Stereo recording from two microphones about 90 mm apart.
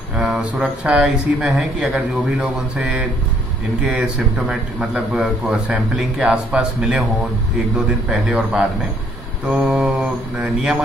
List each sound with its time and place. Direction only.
0.1 s speech: 10° right (ahead or behind)
2.8 s a man's voice: 15° right (ahead or behind)
4.5 s a man's voice: 10° right (ahead or behind)